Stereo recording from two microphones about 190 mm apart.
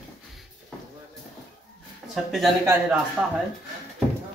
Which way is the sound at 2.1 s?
Centre (ahead or behind).